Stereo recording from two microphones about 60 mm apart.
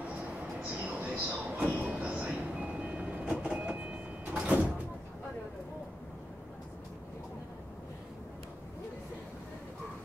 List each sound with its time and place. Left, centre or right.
0.7 s train: right